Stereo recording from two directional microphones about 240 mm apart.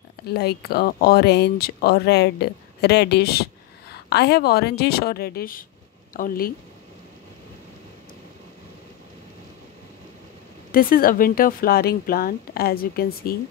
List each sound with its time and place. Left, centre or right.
0.3 s speech: left
10.7 s speech: left